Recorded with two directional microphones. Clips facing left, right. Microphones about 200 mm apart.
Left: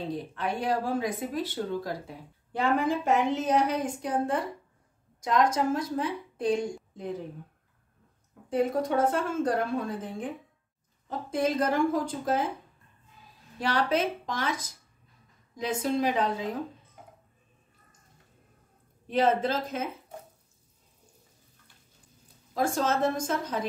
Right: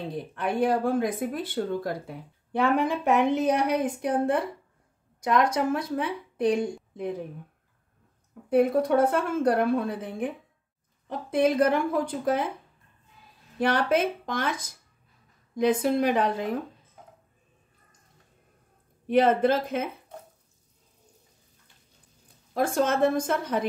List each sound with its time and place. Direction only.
0.1 s speech: 55° right (ahead or behind)
8.5 s speech: 60° right (ahead or behind)
13.6 s speech: 55° right (ahead or behind)
19.0 s speech: 55° right (ahead or behind)
22.5 s speech: 60° right (ahead or behind)